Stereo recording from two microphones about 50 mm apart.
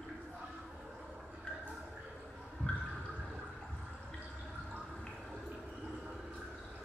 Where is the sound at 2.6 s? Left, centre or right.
Left.